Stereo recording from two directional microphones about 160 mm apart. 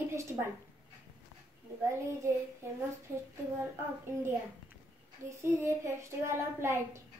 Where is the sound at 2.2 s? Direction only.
20° right (ahead or behind).